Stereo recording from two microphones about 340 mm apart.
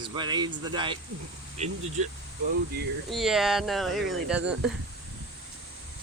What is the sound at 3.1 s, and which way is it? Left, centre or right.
Speech, centre.